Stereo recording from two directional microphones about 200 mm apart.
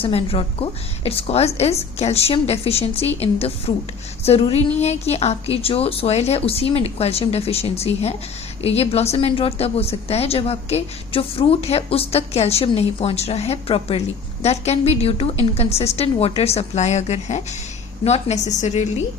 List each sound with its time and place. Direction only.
0.0 s a woman's voice: 30° left (ahead or behind)